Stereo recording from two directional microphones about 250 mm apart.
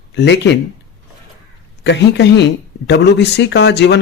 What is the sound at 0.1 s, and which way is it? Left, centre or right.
Speech, left.